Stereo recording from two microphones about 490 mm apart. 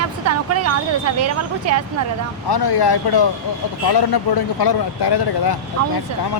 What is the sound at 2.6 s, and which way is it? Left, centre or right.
Speech, left.